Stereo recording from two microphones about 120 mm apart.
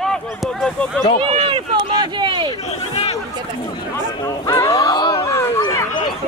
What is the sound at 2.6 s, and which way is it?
Speech, 60° left (ahead or behind).